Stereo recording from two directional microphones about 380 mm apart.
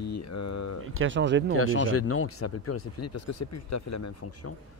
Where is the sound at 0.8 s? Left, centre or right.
Right.